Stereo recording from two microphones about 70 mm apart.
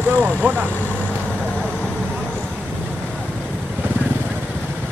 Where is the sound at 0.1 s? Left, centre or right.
Right.